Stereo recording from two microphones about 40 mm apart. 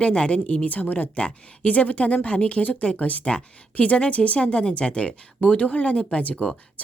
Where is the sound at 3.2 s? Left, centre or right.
Left.